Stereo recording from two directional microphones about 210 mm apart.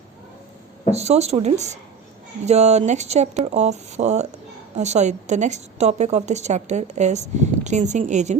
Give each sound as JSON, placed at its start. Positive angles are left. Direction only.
{"t": 0.9, "sound": "a woman's voice", "side_deg": -30}